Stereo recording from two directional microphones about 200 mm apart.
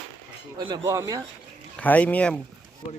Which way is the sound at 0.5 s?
20° right (ahead or behind).